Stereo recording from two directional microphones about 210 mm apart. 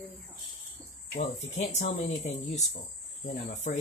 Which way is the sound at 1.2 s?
35° left (ahead or behind).